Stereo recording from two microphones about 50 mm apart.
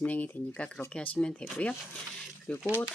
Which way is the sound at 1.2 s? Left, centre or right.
Centre.